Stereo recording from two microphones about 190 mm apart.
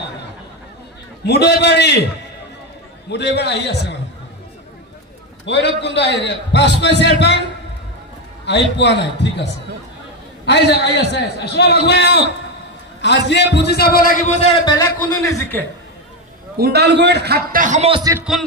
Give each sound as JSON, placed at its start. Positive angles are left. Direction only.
{"t": 1.2, "sound": "a man's voice", "side_deg": 60}
{"t": 3.1, "sound": "a man's voice", "side_deg": 60}
{"t": 5.4, "sound": "a man's voice", "side_deg": 65}
{"t": 8.5, "sound": "a man's voice", "side_deg": 65}
{"t": 14.6, "sound": "a man's voice", "side_deg": 20}
{"t": 16.5, "sound": "a man's voice", "side_deg": -55}